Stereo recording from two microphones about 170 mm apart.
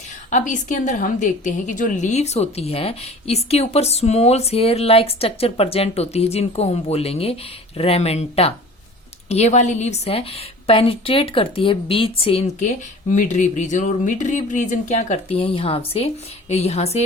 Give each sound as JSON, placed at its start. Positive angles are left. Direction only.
{"t": 0.3, "sound": "a woman's voice", "side_deg": 45}